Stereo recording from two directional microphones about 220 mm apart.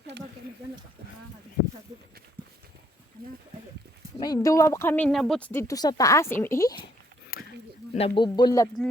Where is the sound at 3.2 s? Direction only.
45° right (ahead or behind).